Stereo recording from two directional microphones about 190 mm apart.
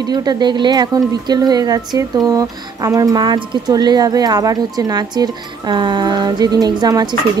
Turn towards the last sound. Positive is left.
turn(degrees=-20)  # may be behind; listen again after turning